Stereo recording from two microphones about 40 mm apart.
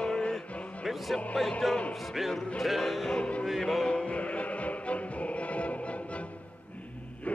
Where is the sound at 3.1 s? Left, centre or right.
Left.